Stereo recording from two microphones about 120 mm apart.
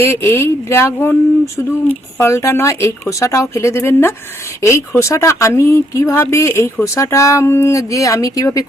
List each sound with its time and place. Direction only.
0.0 s speech: 20° left (ahead or behind)